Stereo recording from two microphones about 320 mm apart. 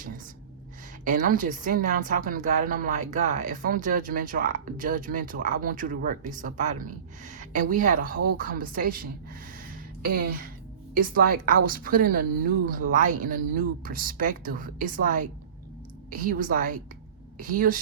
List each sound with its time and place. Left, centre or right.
1.0 s a woman's voice: right
9.6 s a sound: right
10.9 s a woman's voice: right